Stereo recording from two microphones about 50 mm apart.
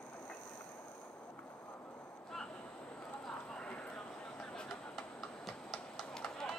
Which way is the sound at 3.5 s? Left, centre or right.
Left.